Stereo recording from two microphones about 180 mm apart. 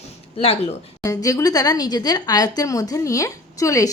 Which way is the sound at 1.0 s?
20° left (ahead or behind).